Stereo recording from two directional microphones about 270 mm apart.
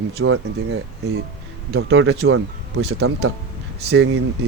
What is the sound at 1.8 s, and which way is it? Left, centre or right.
Speech, right.